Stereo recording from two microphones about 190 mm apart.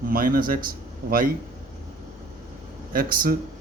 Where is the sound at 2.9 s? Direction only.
50° right (ahead or behind).